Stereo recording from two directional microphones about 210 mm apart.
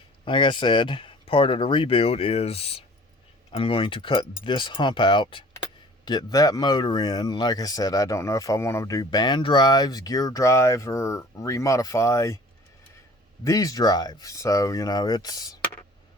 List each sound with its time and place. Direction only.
0.3 s speech: 25° left (ahead or behind)
13.4 s speech: 15° left (ahead or behind)